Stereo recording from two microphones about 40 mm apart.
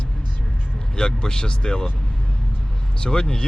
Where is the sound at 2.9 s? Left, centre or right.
Centre.